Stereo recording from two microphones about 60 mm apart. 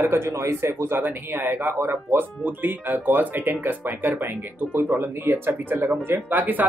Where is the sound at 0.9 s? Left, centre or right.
Right.